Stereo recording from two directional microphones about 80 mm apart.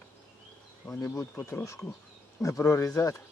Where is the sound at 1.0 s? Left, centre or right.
Left.